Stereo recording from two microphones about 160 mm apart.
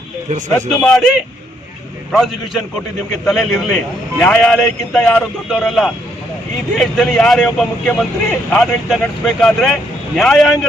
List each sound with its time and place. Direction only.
0.3 s speech: 50° right (ahead or behind)
0.7 s a man's voice: centre (ahead or behind)